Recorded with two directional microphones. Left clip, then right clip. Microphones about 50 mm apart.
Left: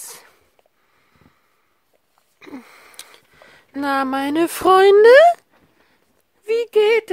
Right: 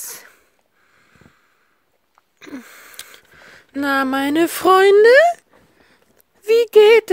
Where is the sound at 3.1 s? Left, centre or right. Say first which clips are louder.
Right 4 dB; centre.